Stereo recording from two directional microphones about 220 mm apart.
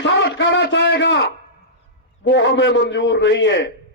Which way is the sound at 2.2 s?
50° left (ahead or behind).